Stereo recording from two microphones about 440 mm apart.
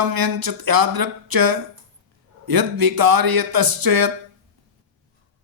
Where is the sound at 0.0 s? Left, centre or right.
Right.